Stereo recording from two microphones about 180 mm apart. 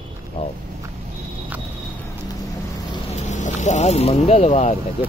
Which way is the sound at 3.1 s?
40° left (ahead or behind).